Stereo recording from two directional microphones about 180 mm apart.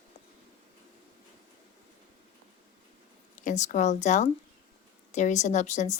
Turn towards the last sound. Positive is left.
turn(degrees=40)  # may be behind; listen again after turning